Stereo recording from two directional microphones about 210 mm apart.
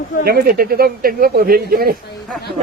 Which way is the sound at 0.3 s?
45° right (ahead or behind).